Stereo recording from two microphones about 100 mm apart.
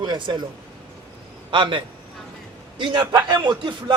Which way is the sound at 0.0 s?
50° right (ahead or behind).